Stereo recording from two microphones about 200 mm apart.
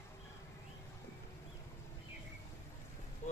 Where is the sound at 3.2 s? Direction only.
35° left (ahead or behind).